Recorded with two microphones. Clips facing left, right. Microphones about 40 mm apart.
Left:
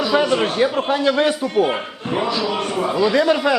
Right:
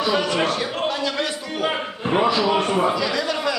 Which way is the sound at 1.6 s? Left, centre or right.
Centre.